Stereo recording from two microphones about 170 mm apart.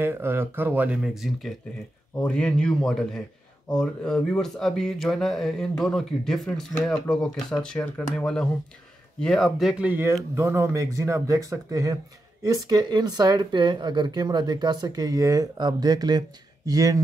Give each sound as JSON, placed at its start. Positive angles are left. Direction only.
{"t": 0.0, "sound": "a man's voice", "side_deg": -15}